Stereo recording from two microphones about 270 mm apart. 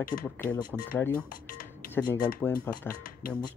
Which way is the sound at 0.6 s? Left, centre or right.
Centre.